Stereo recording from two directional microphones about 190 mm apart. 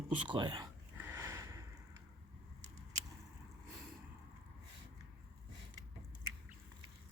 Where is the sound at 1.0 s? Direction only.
10° right (ahead or behind).